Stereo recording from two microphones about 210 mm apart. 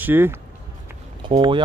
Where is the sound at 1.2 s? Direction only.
20° right (ahead or behind).